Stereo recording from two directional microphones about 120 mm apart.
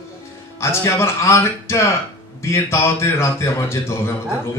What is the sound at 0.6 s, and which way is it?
Speech, 25° left (ahead or behind).